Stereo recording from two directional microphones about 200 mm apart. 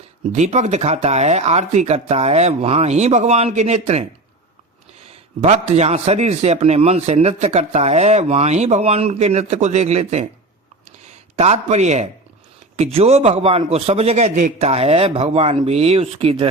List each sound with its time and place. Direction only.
0.3 s a man's voice: 35° right (ahead or behind)
5.0 s a man's voice: 30° right (ahead or behind)
11.3 s a man's voice: 35° right (ahead or behind)